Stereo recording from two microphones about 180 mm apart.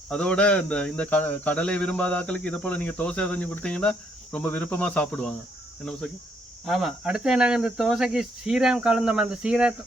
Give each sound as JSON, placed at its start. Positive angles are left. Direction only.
{"t": 0.1, "sound": "speech", "side_deg": 5}
{"t": 6.7, "sound": "speech", "side_deg": 0}